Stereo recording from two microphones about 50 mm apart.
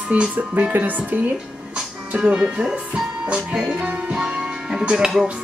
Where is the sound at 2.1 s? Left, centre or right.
Centre.